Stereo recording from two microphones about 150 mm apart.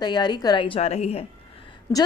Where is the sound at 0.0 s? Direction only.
30° left (ahead or behind).